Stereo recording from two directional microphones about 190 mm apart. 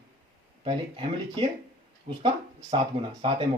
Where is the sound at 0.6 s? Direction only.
25° right (ahead or behind).